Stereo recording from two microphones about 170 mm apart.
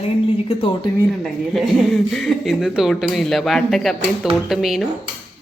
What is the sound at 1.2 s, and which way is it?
Speech, centre (ahead or behind).